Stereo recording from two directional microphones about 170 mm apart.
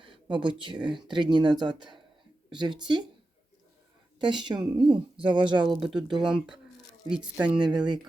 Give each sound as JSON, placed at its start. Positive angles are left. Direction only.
{"t": 0.0, "sound": "a woman's voice", "side_deg": -30}
{"t": 4.2, "sound": "a woman's voice", "side_deg": -25}
{"t": 5.6, "sound": "speech", "side_deg": 0}